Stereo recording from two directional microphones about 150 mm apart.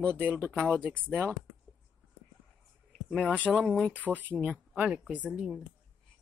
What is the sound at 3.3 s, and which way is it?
Speech, 10° left (ahead or behind).